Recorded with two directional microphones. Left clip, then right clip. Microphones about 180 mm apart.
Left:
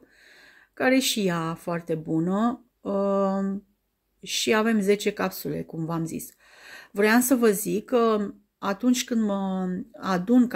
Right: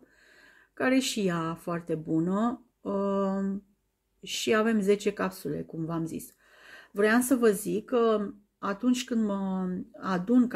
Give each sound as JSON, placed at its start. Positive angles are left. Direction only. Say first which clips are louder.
{"t": 0.4, "sound": "speech", "louder": "left 4 dB", "side_deg": 15}